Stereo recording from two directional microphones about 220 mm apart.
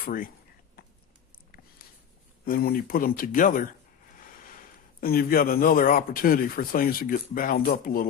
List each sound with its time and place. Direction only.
0.0 s speech: 40° left (ahead or behind)
2.4 s speech: 40° left (ahead or behind)